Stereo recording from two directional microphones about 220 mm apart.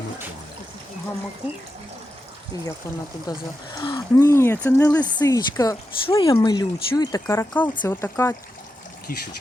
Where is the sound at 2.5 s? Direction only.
15° left (ahead or behind).